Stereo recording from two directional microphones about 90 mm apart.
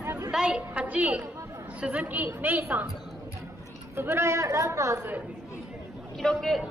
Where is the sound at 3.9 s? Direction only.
25° right (ahead or behind).